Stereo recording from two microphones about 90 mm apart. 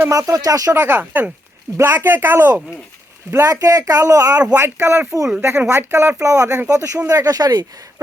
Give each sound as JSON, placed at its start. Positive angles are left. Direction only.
{"t": 0.1, "sound": "speech", "side_deg": -40}
{"t": 0.7, "sound": "speech", "side_deg": -25}
{"t": 3.3, "sound": "speech", "side_deg": -40}